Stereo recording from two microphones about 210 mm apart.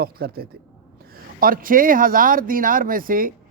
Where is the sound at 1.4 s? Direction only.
40° right (ahead or behind).